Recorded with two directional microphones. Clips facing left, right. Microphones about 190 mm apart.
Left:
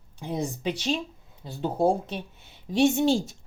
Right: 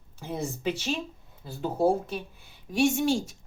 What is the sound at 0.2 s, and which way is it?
Speech, 15° left (ahead or behind).